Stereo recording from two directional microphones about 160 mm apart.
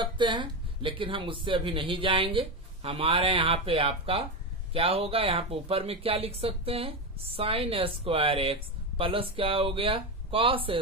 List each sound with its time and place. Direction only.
0.0 s speech: 30° right (ahead or behind)